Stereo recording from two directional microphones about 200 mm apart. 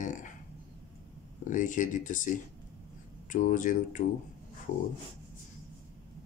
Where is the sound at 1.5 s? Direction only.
40° left (ahead or behind).